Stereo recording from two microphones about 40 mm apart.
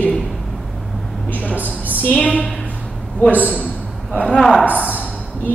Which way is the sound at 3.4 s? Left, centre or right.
Left.